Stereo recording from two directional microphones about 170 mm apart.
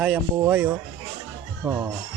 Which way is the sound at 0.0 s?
10° right (ahead or behind).